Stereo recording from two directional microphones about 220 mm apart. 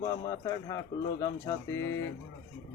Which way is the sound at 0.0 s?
15° left (ahead or behind).